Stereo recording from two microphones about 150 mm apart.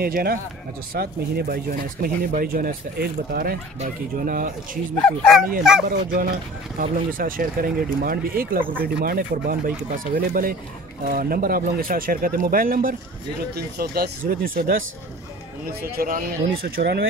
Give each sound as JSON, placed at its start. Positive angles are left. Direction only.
{"t": 0.0, "sound": "speech", "side_deg": -90}
{"t": 5.0, "sound": "speech", "side_deg": 5}
{"t": 5.9, "sound": "speech", "side_deg": -75}
{"t": 13.6, "sound": "speech", "side_deg": -90}